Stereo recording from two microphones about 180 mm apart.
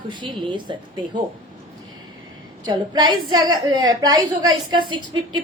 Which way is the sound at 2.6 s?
25° right (ahead or behind).